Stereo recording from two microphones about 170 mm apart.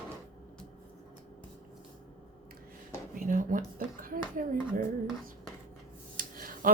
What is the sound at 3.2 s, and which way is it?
A woman's voice, 50° right (ahead or behind).